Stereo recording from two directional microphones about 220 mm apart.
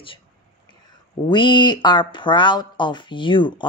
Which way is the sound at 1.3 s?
20° left (ahead or behind).